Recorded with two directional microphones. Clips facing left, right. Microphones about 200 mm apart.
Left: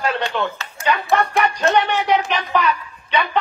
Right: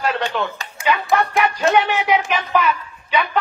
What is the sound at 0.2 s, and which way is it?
Speech, 15° right (ahead or behind).